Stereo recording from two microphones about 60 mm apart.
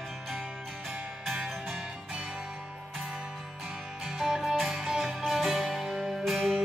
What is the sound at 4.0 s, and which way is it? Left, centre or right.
Music, centre.